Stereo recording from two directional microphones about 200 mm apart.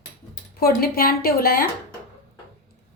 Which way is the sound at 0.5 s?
50° left (ahead or behind).